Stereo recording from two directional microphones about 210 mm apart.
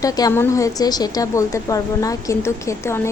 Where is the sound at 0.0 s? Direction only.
15° left (ahead or behind).